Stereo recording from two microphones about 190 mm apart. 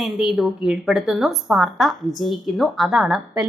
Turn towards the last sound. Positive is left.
turn(degrees=-5)  # may be behind; listen again after turning